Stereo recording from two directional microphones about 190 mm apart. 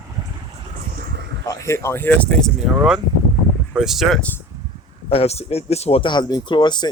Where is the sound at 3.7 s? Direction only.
Centre (ahead or behind).